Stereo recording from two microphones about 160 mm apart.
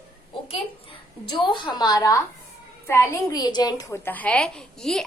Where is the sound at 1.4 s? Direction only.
30° left (ahead or behind).